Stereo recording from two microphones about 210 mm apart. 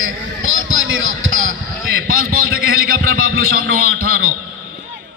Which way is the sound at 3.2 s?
90° right.